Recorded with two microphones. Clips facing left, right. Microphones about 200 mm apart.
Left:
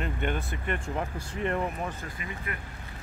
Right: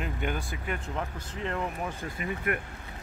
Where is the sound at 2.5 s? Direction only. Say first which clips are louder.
Right 8 dB; 60° right (ahead or behind).